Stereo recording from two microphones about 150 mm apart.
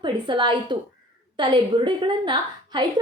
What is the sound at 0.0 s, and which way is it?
A woman's voice, 30° right (ahead or behind).